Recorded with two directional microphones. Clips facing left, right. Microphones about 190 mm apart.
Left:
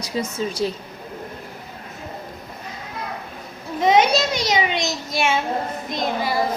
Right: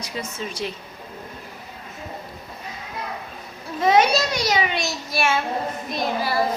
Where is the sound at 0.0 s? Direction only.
40° left (ahead or behind).